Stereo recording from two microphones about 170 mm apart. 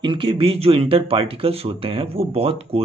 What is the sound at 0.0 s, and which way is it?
Speech, 30° right (ahead or behind).